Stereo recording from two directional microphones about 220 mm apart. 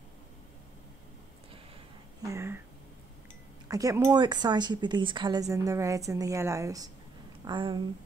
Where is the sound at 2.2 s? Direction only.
10° right (ahead or behind).